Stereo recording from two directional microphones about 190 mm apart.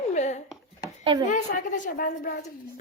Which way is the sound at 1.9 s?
50° left (ahead or behind).